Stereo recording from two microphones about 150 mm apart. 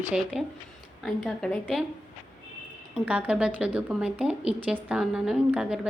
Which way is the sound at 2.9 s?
10° right (ahead or behind).